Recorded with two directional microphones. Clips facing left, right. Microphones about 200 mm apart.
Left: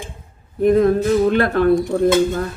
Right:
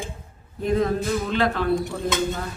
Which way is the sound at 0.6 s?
55° left (ahead or behind).